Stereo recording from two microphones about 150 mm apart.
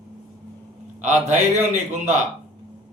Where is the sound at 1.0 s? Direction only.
50° right (ahead or behind).